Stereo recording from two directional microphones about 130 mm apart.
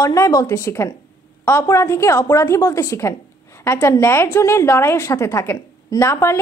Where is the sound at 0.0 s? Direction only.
25° left (ahead or behind).